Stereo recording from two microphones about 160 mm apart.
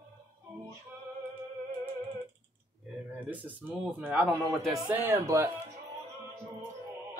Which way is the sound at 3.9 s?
5° right (ahead or behind).